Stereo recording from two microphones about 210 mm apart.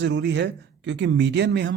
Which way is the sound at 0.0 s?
55° right (ahead or behind).